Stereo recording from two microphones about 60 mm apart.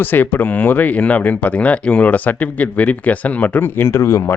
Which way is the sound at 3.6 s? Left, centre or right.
Left.